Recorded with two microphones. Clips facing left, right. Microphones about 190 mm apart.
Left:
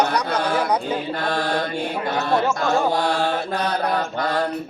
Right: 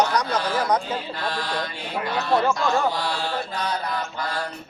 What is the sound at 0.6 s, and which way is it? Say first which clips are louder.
Speech: left 1 dB; 10° left (ahead or behind).